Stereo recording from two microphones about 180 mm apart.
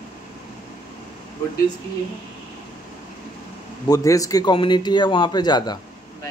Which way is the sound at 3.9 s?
20° left (ahead or behind).